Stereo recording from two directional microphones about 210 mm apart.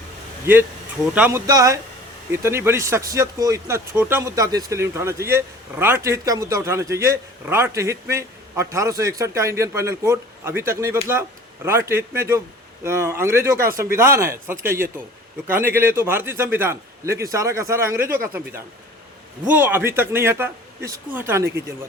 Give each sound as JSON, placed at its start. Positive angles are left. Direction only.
{"t": 1.1, "sound": "speech", "side_deg": -5}